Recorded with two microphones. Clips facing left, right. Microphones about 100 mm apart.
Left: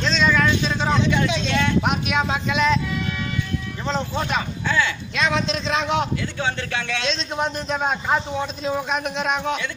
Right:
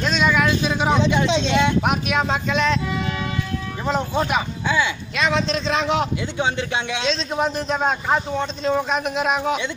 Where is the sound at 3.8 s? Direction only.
10° right (ahead or behind).